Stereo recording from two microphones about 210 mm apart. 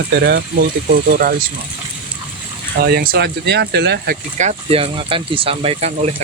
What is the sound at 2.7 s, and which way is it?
Speech, 45° right (ahead or behind).